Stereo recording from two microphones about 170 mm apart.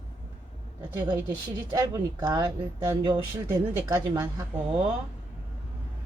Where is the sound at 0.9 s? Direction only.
25° right (ahead or behind).